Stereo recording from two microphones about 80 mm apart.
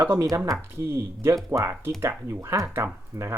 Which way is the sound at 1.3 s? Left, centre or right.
Right.